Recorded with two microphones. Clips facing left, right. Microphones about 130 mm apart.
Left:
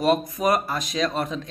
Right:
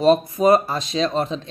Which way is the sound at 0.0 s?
25° right (ahead or behind).